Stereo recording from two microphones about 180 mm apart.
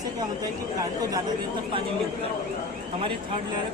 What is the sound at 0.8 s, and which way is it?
Speech, 20° right (ahead or behind).